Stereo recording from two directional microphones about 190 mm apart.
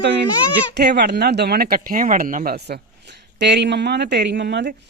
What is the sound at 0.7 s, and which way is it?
Speech, 60° right (ahead or behind).